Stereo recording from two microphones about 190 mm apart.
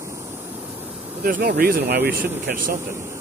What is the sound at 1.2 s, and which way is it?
Speech, 50° right (ahead or behind).